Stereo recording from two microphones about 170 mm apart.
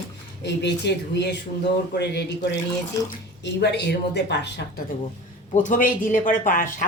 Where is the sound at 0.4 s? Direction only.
85° left.